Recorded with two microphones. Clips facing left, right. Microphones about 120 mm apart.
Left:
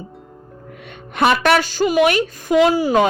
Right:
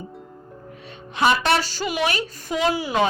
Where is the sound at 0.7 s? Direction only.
65° left (ahead or behind).